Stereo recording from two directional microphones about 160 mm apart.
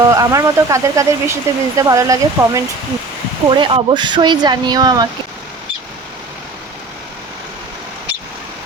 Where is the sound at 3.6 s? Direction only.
30° right (ahead or behind).